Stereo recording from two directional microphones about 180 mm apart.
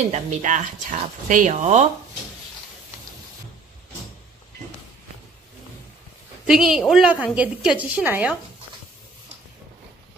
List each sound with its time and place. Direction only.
0.1 s speech: 45° right (ahead or behind)
6.4 s a woman's voice: 5° right (ahead or behind)